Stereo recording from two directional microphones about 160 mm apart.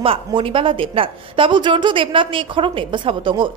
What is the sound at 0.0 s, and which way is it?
Speech, 35° right (ahead or behind).